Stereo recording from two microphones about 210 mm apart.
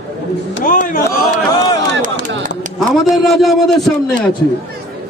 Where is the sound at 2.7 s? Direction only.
Centre (ahead or behind).